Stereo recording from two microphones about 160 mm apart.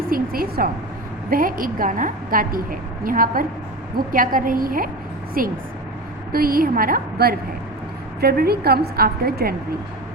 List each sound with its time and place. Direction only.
0.1 s a woman's voice: 65° right (ahead or behind)